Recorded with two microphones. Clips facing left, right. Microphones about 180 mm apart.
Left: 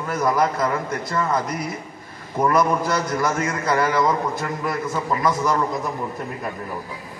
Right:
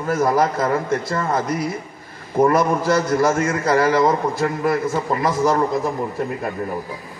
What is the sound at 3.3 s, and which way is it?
A man's voice, 30° right (ahead or behind).